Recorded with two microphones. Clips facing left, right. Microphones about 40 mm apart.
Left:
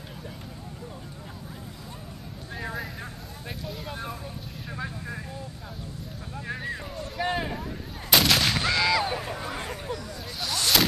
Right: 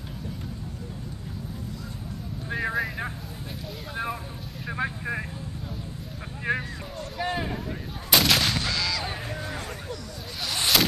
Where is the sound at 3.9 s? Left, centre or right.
Right.